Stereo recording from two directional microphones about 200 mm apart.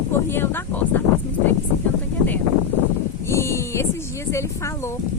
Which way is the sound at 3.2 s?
15° left (ahead or behind).